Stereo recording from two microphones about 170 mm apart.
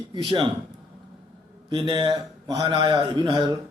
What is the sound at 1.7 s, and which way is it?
Speech, 30° right (ahead or behind).